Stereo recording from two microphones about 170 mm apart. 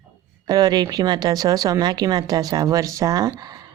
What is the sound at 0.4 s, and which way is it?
Speech, 25° right (ahead or behind).